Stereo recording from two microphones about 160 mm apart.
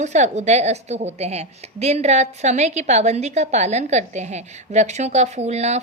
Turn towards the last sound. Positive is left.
turn(degrees=-45)  # may be behind; listen again after turning